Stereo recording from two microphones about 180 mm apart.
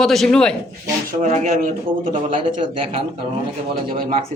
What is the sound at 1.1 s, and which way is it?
Speech, 45° right (ahead or behind).